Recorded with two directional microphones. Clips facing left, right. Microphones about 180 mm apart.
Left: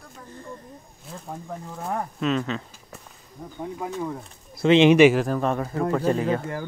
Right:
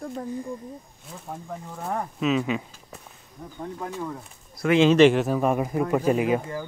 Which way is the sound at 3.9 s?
15° left (ahead or behind).